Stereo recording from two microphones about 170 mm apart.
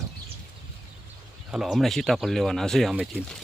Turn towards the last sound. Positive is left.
turn(degrees=-5)  # may be behind; listen again after turning